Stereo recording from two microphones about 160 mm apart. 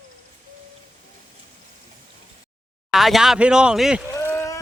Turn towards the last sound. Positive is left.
turn(degrees=15)  # may be behind; listen again after turning